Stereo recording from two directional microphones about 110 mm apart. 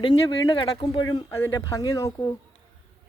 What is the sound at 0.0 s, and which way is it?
Speech, 40° left (ahead or behind).